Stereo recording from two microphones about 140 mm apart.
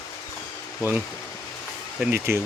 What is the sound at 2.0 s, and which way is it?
Speech, 15° right (ahead or behind).